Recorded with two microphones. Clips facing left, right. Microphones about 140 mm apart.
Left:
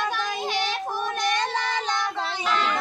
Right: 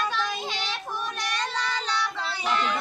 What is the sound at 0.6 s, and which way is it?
Child singing, 50° left (ahead or behind).